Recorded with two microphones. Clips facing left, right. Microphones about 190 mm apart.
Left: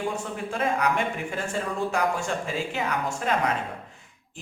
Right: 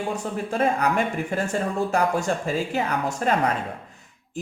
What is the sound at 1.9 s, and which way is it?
Speech, 40° right (ahead or behind).